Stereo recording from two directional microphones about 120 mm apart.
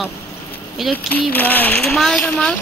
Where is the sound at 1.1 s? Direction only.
15° left (ahead or behind).